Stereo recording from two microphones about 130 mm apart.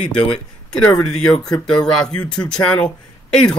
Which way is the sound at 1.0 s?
5° left (ahead or behind).